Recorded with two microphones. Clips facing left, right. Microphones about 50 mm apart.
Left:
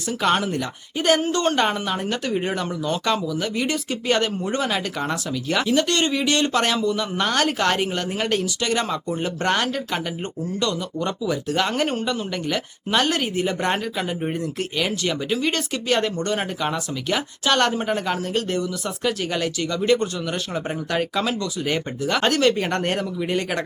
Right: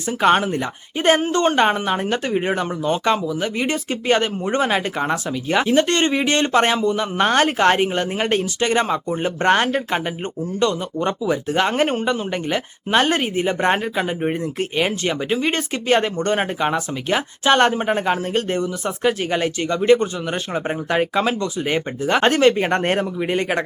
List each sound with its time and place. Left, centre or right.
0.2 s speech: right